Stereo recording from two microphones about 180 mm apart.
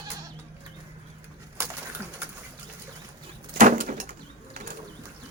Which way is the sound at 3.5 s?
45° right (ahead or behind).